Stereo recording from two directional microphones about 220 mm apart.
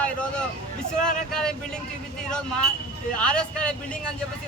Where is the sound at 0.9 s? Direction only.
35° left (ahead or behind).